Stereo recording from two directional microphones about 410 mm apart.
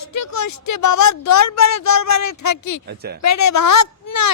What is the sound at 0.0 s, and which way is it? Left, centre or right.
A woman's voice, left.